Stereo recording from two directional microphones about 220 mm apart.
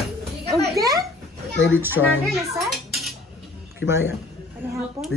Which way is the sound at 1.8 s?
10° right (ahead or behind).